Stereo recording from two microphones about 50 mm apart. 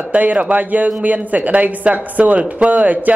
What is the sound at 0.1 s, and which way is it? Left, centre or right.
Speech, right.